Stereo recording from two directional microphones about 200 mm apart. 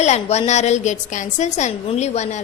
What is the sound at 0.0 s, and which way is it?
A woman's voice, 35° left (ahead or behind).